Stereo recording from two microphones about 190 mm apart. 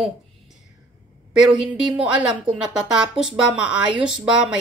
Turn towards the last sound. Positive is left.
turn(degrees=-5)  # may be behind; listen again after turning